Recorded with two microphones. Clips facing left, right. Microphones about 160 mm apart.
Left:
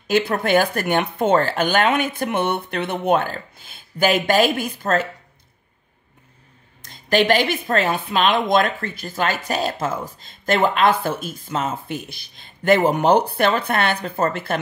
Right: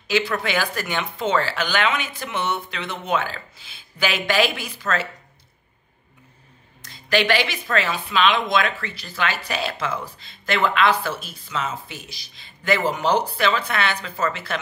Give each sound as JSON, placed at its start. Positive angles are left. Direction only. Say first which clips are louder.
{"t": 0.4, "sound": "a woman's voice", "louder": "left 7 dB", "side_deg": 55}
{"t": 6.8, "sound": "a woman's voice", "louder": "left 3 dB", "side_deg": 50}